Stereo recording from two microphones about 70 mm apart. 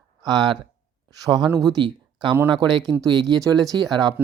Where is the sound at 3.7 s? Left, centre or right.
Right.